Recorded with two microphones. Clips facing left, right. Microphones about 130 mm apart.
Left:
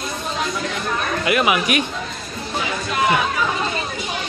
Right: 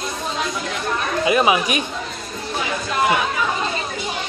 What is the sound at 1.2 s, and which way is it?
Speech, 25° right (ahead or behind).